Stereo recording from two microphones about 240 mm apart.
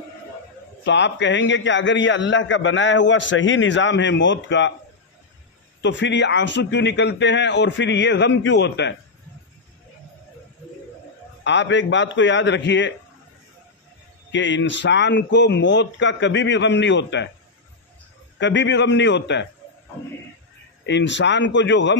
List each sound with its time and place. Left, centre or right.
0.8 s a man's voice: left
5.8 s a man's voice: left
11.4 s a man's voice: left
14.3 s a man's voice: left
18.4 s a man's voice: left
20.8 s a man's voice: left